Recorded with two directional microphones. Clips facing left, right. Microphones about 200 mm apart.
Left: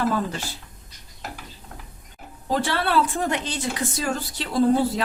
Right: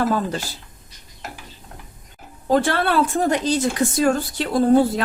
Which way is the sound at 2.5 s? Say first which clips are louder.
Right 5 dB; 50° right (ahead or behind).